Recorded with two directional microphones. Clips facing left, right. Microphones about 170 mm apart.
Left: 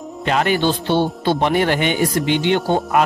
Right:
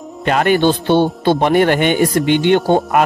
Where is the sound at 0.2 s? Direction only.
55° right (ahead or behind).